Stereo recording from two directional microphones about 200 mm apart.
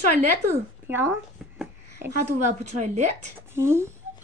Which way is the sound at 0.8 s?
10° right (ahead or behind).